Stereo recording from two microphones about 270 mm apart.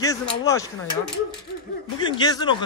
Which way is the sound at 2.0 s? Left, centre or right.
Centre.